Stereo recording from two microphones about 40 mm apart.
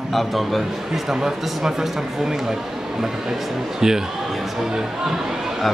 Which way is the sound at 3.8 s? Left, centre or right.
Centre.